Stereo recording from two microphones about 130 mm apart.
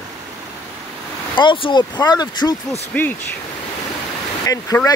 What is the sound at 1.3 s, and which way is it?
Speech, 40° left (ahead or behind).